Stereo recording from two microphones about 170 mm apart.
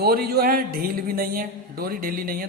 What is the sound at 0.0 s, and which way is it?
A man's voice, 65° right (ahead or behind).